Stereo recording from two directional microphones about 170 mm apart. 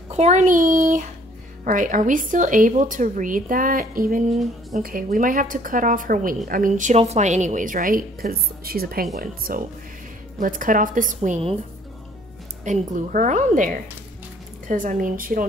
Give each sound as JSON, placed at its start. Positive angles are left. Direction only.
{"t": 0.1, "sound": "a woman's voice", "side_deg": -40}
{"t": 4.3, "sound": "speech", "side_deg": 0}
{"t": 4.8, "sound": "a woman's voice", "side_deg": -55}
{"t": 12.6, "sound": "a woman's voice", "side_deg": -45}
{"t": 14.7, "sound": "a woman's voice", "side_deg": -50}